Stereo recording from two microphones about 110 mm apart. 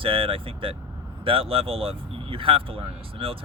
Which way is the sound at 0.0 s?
55° right (ahead or behind).